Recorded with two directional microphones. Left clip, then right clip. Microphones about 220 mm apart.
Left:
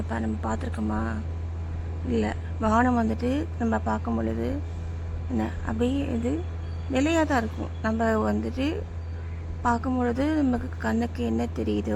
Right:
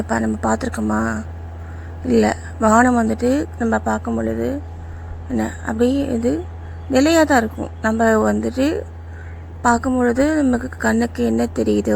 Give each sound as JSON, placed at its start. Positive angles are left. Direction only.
{"t": 0.1, "sound": "a woman's voice", "side_deg": -20}